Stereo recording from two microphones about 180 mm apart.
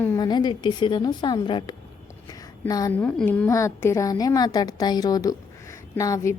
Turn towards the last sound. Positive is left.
turn(degrees=20)  # may be behind; listen again after turning